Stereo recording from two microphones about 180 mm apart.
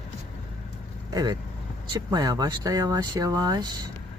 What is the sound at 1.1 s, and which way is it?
Speech, 25° right (ahead or behind).